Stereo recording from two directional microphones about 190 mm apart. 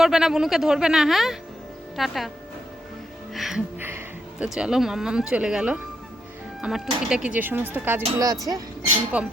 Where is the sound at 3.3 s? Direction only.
Centre (ahead or behind).